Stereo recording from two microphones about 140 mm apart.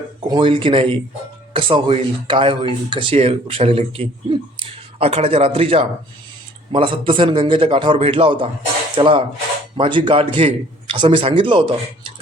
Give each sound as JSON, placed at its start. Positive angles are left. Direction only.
{"t": 0.3, "sound": "a man's voice", "side_deg": -35}